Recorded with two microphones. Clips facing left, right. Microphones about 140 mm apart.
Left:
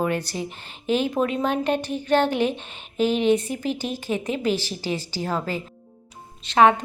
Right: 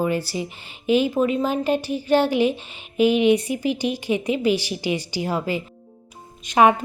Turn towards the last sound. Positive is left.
turn(degrees=-10)  # may be behind; listen again after turning